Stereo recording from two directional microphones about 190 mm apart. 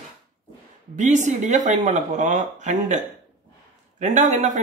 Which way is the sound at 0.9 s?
40° right (ahead or behind).